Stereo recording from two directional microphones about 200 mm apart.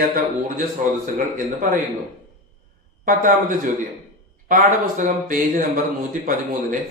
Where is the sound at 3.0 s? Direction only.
45° right (ahead or behind).